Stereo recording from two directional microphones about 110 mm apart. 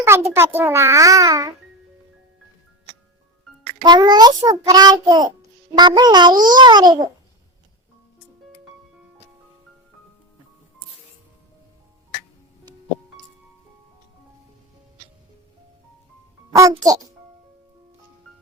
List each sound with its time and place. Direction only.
0.3 s a child's voice: 20° right (ahead or behind)
3.8 s a child's voice: 40° right (ahead or behind)
16.6 s a child's voice: 30° right (ahead or behind)